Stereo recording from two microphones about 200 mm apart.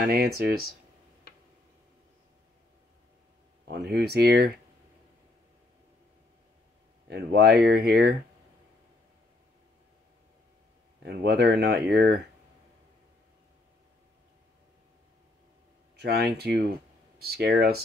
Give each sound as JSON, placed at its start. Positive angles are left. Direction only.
{"t": 0.0, "sound": "speech", "side_deg": -50}
{"t": 3.6, "sound": "speech", "side_deg": -55}
{"t": 7.1, "sound": "speech", "side_deg": -55}
{"t": 11.0, "sound": "speech", "side_deg": -55}
{"t": 16.0, "sound": "speech", "side_deg": -55}